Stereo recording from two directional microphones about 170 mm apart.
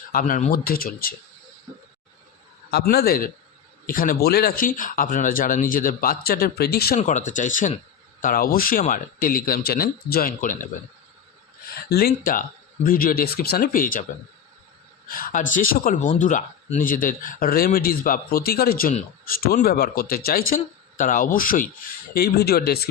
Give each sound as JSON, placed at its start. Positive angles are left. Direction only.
{"t": 0.1, "sound": "speech", "side_deg": 55}
{"t": 0.6, "sound": "speech", "side_deg": 60}
{"t": 2.6, "sound": "speech", "side_deg": 70}
{"t": 11.9, "sound": "speech", "side_deg": 65}
{"t": 15.0, "sound": "speech", "side_deg": 55}